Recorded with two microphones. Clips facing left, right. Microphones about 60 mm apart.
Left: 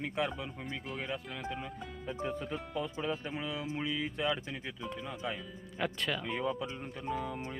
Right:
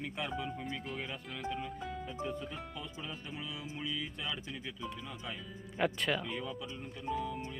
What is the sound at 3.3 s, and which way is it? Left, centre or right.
Speech, left.